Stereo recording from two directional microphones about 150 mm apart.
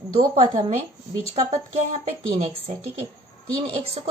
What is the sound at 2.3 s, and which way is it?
Speech, 40° right (ahead or behind).